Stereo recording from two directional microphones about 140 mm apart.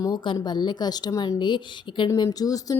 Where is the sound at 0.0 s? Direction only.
35° left (ahead or behind).